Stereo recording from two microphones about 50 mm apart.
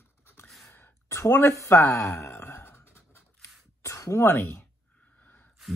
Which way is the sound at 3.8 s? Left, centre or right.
Left.